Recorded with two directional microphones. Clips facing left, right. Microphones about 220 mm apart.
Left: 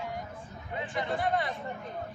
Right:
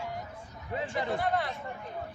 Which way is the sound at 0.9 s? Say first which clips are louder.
Left 1 dB; centre (ahead or behind).